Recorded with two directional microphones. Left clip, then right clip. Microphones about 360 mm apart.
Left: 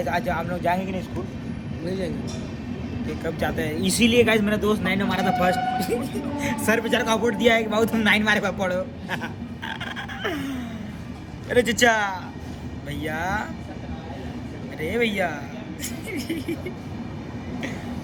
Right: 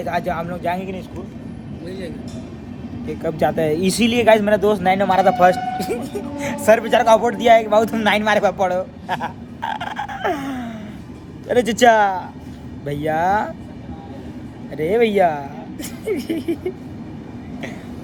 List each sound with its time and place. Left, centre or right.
0.0 s a man's voice: centre
1.9 s speech: centre
3.1 s a man's voice: centre
14.8 s speech: centre